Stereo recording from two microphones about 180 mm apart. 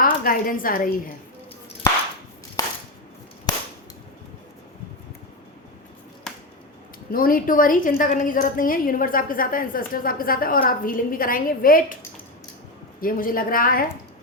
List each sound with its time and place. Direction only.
0.0 s a woman's voice: 50° left (ahead or behind)
2.6 s a sound: 20° left (ahead or behind)
7.1 s a woman's voice: 50° left (ahead or behind)
13.0 s a woman's voice: 50° left (ahead or behind)